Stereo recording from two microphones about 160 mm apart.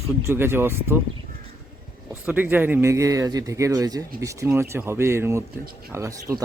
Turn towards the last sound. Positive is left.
turn(degrees=-20)  # may be behind; listen again after turning